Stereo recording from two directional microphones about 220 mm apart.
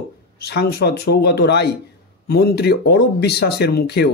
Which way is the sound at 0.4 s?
45° left (ahead or behind).